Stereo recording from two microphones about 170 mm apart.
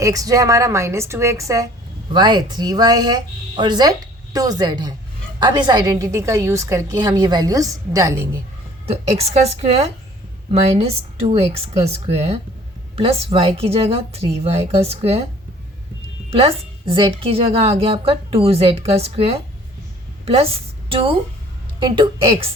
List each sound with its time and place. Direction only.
0.0 s a woman's voice: 20° right (ahead or behind)
8.9 s a woman's voice: 35° right (ahead or behind)
16.3 s a woman's voice: 35° right (ahead or behind)